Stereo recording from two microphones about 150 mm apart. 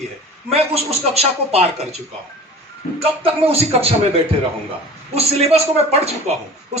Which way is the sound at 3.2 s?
40° right (ahead or behind).